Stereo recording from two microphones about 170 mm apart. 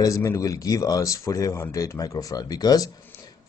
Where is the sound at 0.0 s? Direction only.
20° left (ahead or behind).